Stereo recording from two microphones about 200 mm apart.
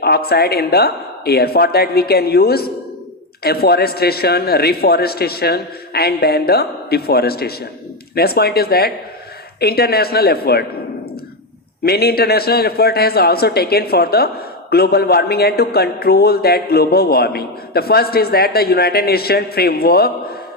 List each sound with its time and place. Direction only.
0.0 s a man's voice: 50° left (ahead or behind)
11.8 s a man's voice: 50° left (ahead or behind)